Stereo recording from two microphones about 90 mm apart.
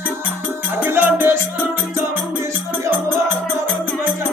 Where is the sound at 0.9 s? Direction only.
25° right (ahead or behind).